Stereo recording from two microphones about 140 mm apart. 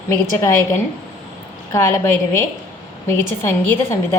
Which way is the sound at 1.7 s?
20° left (ahead or behind).